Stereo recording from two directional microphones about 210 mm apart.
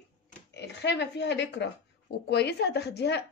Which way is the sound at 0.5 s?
55° left (ahead or behind).